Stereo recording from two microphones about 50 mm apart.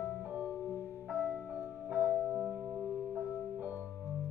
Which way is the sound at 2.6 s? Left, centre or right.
Right.